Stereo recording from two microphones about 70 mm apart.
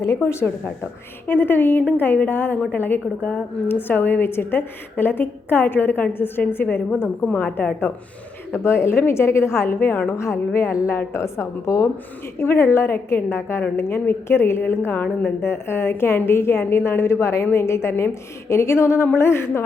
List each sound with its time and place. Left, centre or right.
0.0 s a woman's voice: left
1.3 s a woman's voice: left
8.5 s a woman's voice: left
14.8 s a woman's voice: left